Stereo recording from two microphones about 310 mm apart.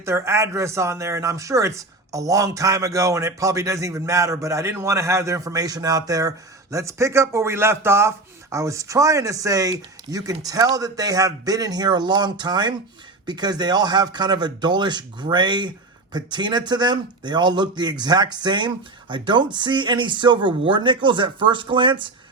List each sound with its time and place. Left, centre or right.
0.0 s speech: centre